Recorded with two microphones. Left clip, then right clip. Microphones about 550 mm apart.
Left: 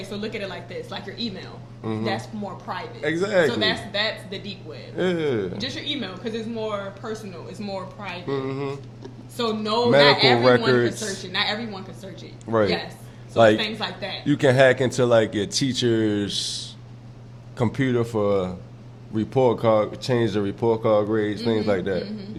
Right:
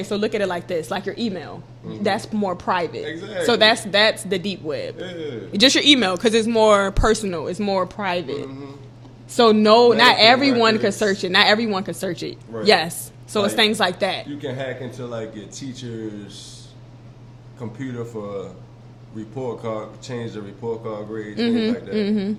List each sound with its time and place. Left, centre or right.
0.1 s speech: right
3.0 s speech: left
3.5 s speech: right
4.9 s speech: left
5.5 s speech: right
9.4 s speech: right
13.6 s speech: right
14.3 s speech: left
17.6 s speech: left
21.6 s speech: right